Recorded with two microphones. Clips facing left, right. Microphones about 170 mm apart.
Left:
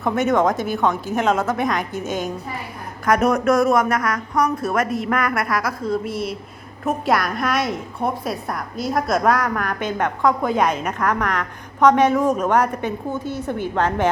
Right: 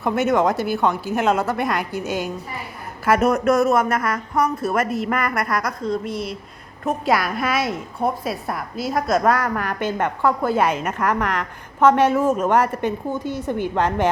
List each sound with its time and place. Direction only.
0.0 s a woman's voice: centre (ahead or behind)
4.4 s a woman's voice: 25° right (ahead or behind)
4.7 s a woman's voice: 5° right (ahead or behind)